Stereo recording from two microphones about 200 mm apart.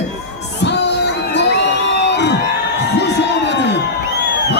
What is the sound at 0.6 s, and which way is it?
Crowd, 60° left (ahead or behind).